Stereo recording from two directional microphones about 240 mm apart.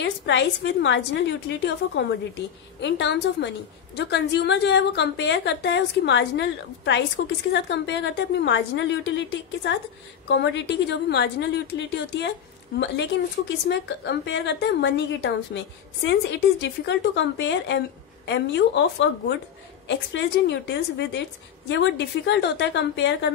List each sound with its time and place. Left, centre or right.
0.0 s a woman's voice: left